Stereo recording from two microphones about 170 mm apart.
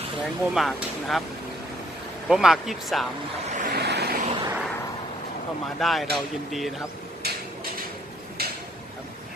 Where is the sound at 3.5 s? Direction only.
65° right (ahead or behind).